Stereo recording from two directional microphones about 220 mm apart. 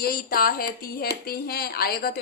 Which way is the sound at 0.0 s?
45° left (ahead or behind).